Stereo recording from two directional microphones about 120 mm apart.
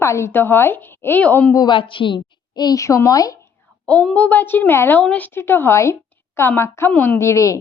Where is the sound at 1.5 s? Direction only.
40° left (ahead or behind).